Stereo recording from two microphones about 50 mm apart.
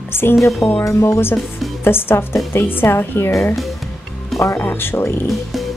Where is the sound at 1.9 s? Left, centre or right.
Left.